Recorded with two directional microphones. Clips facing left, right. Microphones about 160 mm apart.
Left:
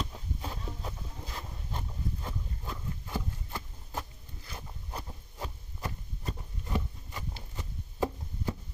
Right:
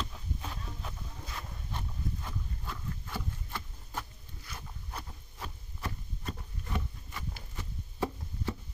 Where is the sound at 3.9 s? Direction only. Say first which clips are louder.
Left 2 dB; 25° left (ahead or behind).